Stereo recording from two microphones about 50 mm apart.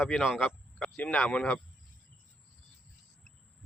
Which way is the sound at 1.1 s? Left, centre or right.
Left.